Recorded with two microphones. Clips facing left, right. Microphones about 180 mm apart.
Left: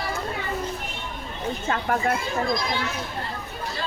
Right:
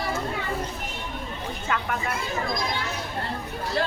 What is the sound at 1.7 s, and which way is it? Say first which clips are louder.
Speech: left 4 dB; 40° left (ahead or behind).